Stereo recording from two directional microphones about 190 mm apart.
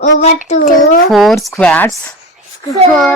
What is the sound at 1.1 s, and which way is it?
Speech, centre (ahead or behind).